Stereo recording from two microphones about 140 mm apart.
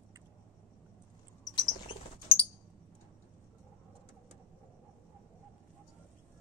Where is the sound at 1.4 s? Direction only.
35° left (ahead or behind).